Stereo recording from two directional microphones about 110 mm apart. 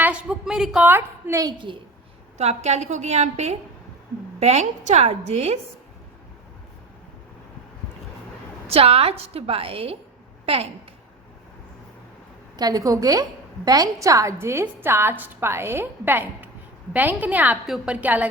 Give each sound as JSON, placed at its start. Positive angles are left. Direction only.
{"t": 0.0, "sound": "a woman's voice", "side_deg": -10}
{"t": 0.9, "sound": "a woman's voice", "side_deg": -25}
{"t": 2.4, "sound": "a woman's voice", "side_deg": -80}
{"t": 8.6, "sound": "a woman's voice", "side_deg": -65}
{"t": 12.5, "sound": "a woman's voice", "side_deg": -35}